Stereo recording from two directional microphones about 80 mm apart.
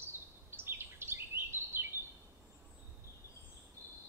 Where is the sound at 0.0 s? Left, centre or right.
Right.